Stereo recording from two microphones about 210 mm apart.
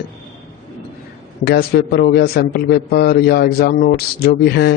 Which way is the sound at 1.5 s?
50° left (ahead or behind).